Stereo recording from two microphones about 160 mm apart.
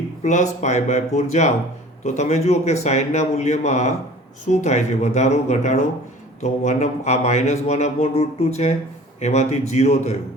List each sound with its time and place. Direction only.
0.2 s speech: 50° left (ahead or behind)